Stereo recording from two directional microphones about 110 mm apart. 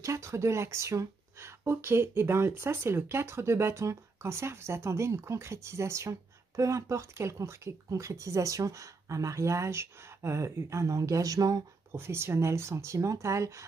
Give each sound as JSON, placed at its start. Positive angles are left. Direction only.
{"t": 0.0, "sound": "speech", "side_deg": -30}